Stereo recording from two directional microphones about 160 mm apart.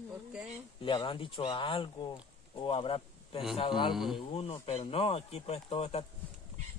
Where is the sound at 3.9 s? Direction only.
Centre (ahead or behind).